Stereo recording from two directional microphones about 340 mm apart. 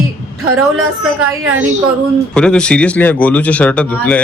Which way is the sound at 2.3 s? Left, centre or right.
Centre.